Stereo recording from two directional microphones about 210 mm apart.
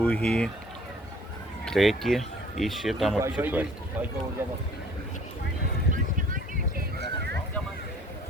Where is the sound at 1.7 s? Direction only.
Centre (ahead or behind).